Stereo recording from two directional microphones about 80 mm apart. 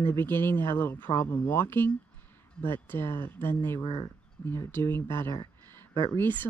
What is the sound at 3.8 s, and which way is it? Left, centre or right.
Speech, left.